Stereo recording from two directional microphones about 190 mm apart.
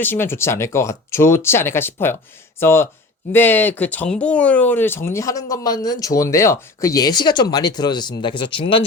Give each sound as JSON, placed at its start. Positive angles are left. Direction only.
{"t": 0.0, "sound": "speech", "side_deg": 10}